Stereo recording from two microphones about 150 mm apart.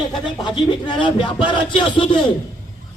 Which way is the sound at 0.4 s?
30° left (ahead or behind).